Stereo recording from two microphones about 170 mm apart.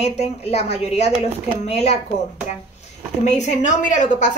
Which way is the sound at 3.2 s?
45° left (ahead or behind).